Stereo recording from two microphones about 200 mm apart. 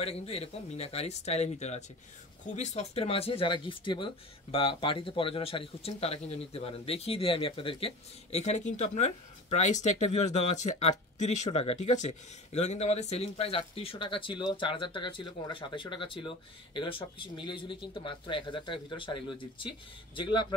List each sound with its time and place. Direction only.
0.0 s speech: 30° left (ahead or behind)